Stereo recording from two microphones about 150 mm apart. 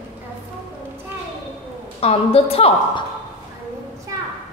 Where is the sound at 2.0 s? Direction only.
40° left (ahead or behind).